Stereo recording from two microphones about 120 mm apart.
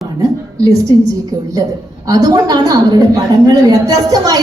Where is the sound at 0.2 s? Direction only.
25° right (ahead or behind).